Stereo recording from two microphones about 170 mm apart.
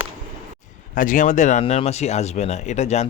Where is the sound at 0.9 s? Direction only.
50° left (ahead or behind).